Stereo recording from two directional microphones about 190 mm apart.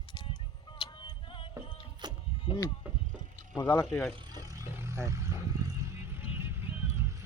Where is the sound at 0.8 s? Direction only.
25° left (ahead or behind).